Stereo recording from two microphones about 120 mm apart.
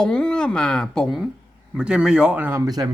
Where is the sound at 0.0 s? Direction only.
5° left (ahead or behind); by 2.6 s 15° right (ahead or behind).